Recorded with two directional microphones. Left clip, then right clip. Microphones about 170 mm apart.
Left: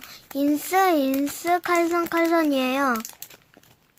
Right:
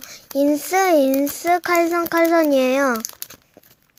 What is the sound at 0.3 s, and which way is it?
A child's voice, 30° right (ahead or behind).